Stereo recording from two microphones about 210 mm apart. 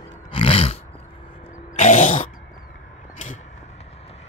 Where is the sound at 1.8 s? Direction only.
35° left (ahead or behind).